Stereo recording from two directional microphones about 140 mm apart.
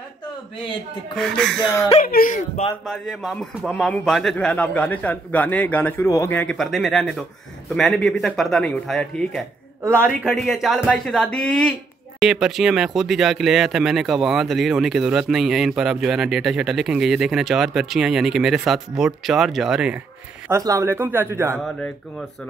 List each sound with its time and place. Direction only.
1.1 s speech: 5° left (ahead or behind)
2.0 s speech: 80° left
2.8 s a man's voice: centre (ahead or behind)
6.0 s speech: 25° left (ahead or behind)
6.3 s speech: 5° left (ahead or behind)
20.4 s speech: 20° right (ahead or behind)
21.6 s speech: 5° left (ahead or behind)